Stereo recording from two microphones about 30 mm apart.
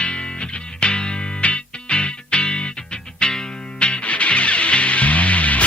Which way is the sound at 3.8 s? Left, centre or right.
Left.